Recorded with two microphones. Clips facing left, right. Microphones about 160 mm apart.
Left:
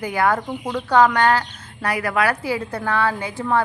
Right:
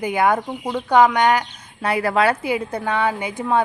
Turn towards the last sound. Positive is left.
turn(degrees=-20)  # may be behind; listen again after turning